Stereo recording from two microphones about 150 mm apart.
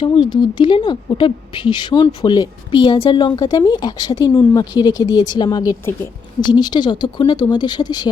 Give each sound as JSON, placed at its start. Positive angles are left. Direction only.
{"t": 0.0, "sound": "a woman's voice", "side_deg": 30}